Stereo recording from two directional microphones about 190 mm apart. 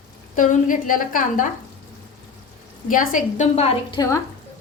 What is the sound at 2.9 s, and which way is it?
A woman's voice, 45° left (ahead or behind).